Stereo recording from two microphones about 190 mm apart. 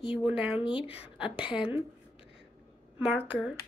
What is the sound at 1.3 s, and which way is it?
Speech, 5° right (ahead or behind).